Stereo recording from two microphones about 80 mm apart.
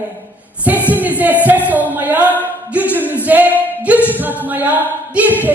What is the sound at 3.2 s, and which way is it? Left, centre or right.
A capella, right.